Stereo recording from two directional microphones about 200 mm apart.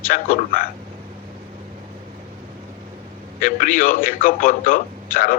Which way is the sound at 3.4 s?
40° left (ahead or behind).